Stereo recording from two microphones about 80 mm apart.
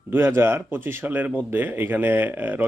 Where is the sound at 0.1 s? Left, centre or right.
Right.